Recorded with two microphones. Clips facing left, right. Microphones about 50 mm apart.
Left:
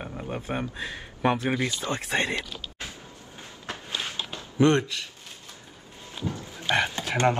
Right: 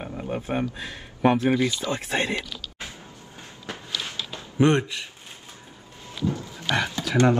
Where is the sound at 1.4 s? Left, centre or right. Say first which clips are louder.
Right 5 dB; left.